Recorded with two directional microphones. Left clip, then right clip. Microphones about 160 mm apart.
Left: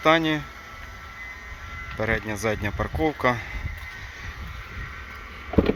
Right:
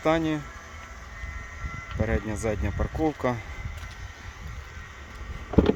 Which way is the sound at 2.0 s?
5° right (ahead or behind).